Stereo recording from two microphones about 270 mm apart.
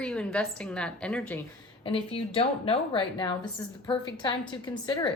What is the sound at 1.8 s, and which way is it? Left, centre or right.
A woman's voice, centre.